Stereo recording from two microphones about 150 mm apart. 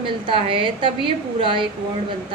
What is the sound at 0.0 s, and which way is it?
Speech, 35° right (ahead or behind).